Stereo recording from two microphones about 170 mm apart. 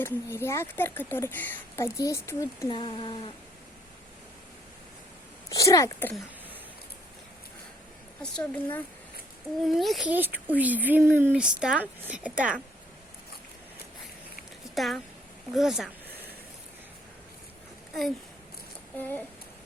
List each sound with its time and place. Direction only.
0.0 s speech: 15° left (ahead or behind)
5.5 s speech: 20° left (ahead or behind)
8.2 s speech: 5° left (ahead or behind)
14.8 s speech: centre (ahead or behind)
18.9 s speech: 10° left (ahead or behind)